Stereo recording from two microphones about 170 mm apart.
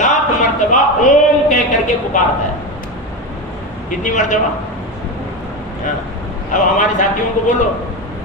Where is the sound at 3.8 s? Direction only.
50° left (ahead or behind).